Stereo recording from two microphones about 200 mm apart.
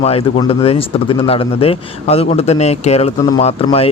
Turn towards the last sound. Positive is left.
turn(degrees=30)  # may be behind; listen again after turning